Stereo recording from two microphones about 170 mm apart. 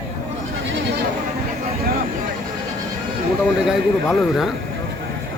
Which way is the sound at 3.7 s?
Centre (ahead or behind).